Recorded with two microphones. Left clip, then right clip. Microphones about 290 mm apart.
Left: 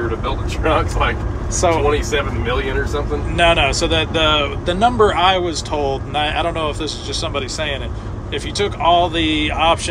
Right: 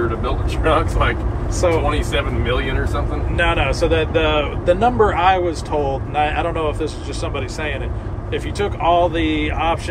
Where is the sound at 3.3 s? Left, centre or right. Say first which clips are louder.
Left 4 dB; centre.